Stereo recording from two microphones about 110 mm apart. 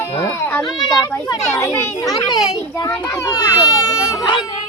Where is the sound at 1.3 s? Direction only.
30° left (ahead or behind).